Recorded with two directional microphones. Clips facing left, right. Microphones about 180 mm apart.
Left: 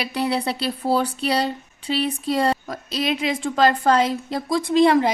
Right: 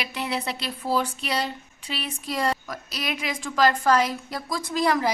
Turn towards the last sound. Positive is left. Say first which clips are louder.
# left 7 dB
turn(degrees=25)  # may be behind; listen again after turning